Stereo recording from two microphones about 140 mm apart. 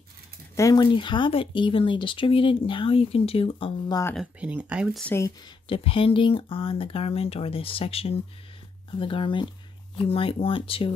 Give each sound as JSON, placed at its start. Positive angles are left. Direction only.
{"t": 0.6, "sound": "speech", "side_deg": 25}
{"t": 0.9, "sound": "speech", "side_deg": 35}
{"t": 4.4, "sound": "speech", "side_deg": -10}
{"t": 5.4, "sound": "speech", "side_deg": 40}